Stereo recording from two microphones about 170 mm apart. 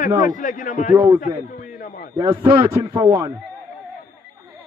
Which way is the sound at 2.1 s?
20° right (ahead or behind).